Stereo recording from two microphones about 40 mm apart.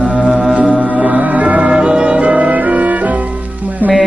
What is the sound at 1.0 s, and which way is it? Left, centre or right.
Music, right.